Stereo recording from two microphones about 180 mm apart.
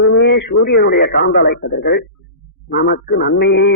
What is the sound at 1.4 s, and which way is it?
A man's voice, 60° left (ahead or behind).